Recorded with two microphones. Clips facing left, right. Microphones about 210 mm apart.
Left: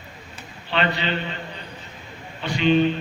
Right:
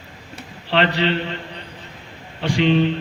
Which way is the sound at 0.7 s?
85° right.